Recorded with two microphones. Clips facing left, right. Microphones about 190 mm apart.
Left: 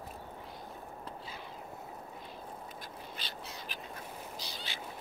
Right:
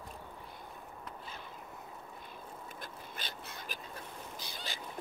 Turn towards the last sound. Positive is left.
turn(degrees=-50)  # may be behind; listen again after turning